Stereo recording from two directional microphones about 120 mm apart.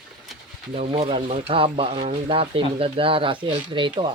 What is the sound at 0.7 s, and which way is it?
Speech, 55° right (ahead or behind).